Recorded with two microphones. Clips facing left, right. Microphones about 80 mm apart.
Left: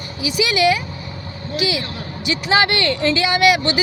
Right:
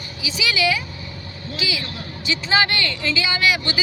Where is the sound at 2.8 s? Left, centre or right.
Left.